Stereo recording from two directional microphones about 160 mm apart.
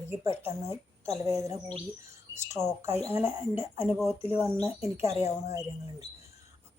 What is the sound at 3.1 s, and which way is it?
Speech, 15° right (ahead or behind).